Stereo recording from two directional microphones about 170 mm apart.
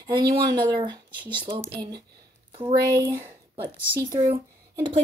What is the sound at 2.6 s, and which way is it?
Speech, 15° right (ahead or behind).